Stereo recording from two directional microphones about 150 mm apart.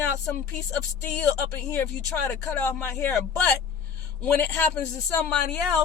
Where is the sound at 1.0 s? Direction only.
10° left (ahead or behind).